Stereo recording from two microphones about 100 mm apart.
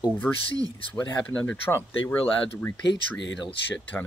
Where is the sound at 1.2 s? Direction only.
15° left (ahead or behind).